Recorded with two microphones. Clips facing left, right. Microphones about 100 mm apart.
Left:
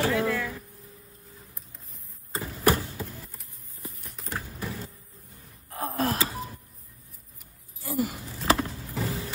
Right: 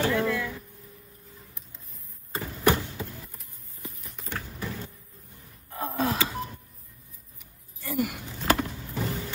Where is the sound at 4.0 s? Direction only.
Centre (ahead or behind).